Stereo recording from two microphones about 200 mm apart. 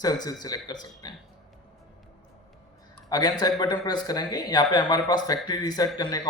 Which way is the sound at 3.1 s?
20° left (ahead or behind).